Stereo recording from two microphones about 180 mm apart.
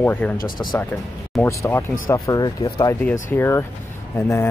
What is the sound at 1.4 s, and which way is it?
Speech, 15° left (ahead or behind).